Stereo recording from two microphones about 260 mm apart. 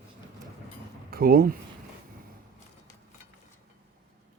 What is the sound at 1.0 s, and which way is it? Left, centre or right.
Speech, right.